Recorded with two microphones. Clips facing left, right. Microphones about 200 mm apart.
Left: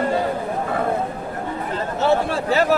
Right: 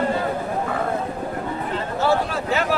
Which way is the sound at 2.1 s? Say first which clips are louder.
Left 3 dB; 35° left (ahead or behind).